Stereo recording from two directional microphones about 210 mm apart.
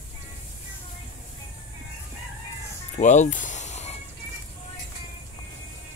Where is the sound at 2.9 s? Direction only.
35° left (ahead or behind).